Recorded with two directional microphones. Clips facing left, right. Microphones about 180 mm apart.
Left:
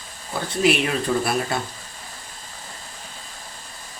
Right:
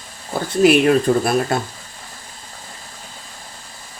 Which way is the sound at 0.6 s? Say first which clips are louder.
Right 8 dB; 50° right (ahead or behind).